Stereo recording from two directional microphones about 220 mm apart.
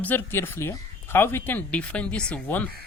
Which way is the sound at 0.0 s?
10° left (ahead or behind).